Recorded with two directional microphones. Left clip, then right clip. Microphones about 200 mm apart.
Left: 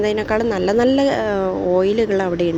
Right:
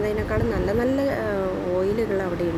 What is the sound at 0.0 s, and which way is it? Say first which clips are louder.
Speech: left 6 dB; 35° left (ahead or behind).